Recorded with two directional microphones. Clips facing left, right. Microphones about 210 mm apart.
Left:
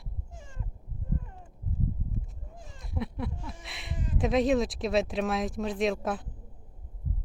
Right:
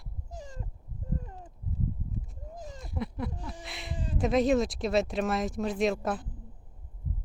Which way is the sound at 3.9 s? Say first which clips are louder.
Left 1 dB; 30° right (ahead or behind).